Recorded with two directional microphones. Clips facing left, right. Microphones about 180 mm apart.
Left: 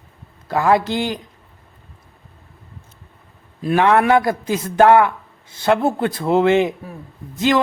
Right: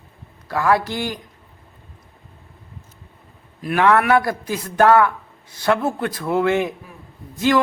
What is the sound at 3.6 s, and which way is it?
Speech, 25° left (ahead or behind).